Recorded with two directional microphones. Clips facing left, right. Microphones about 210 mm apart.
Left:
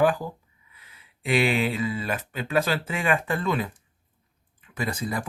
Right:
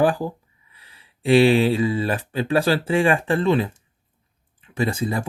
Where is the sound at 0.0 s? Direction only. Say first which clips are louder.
Right 3 dB; 30° right (ahead or behind).